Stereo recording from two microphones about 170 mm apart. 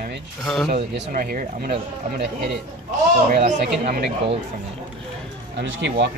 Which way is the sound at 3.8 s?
70° right (ahead or behind).